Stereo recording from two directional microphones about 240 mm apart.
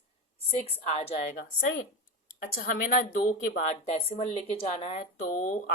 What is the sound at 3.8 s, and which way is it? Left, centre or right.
Speech, left.